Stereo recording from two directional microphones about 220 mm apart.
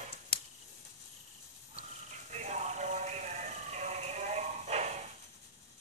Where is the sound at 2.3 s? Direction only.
30° right (ahead or behind).